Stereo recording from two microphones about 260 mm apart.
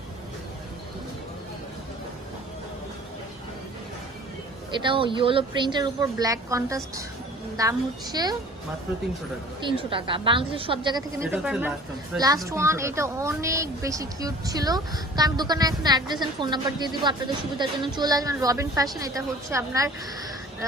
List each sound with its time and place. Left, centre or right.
4.8 s a woman's voice: centre
9.6 s a woman's voice: centre